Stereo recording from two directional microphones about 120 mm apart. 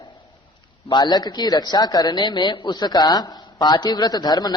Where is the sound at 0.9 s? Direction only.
35° left (ahead or behind).